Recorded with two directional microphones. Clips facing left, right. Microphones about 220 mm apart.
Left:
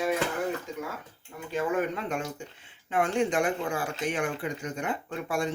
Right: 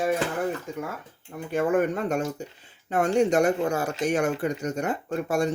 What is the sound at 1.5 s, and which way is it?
Speech, 55° right (ahead or behind).